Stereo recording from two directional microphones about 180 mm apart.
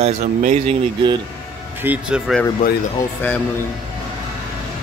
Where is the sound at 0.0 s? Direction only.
40° right (ahead or behind).